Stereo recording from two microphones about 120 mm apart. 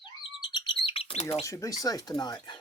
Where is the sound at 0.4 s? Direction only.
40° left (ahead or behind); by 1.5 s 55° left (ahead or behind).